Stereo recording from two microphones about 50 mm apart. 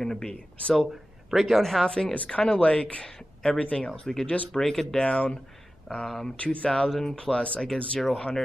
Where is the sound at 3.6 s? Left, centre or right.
Left.